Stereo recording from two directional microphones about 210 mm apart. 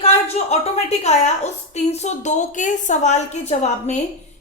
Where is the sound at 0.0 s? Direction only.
30° left (ahead or behind).